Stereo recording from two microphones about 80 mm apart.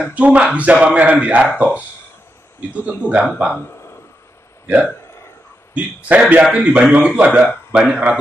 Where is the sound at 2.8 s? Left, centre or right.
Centre.